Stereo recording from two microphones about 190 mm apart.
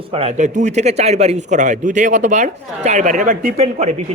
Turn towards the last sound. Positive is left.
turn(degrees=-35)  # may be behind; listen again after turning